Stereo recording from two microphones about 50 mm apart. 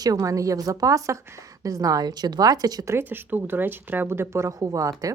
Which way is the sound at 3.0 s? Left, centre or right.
Right.